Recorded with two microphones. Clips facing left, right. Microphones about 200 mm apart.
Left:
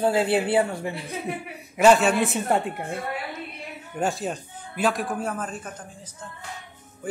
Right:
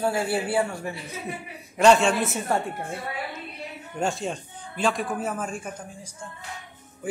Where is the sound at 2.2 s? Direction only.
15° left (ahead or behind).